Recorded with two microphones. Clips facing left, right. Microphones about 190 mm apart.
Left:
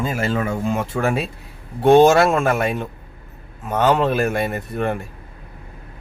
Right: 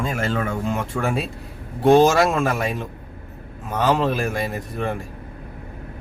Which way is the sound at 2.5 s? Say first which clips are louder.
Left 4 dB; 60° left (ahead or behind).